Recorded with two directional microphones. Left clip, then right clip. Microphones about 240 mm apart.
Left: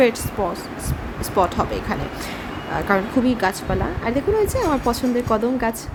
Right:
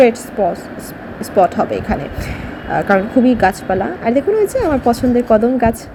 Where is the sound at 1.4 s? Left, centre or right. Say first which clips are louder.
Right 7 dB; centre.